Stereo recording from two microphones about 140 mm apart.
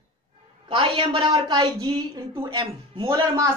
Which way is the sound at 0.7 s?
40° right (ahead or behind).